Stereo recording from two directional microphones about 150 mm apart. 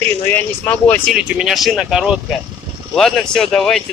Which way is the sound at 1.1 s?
Centre (ahead or behind).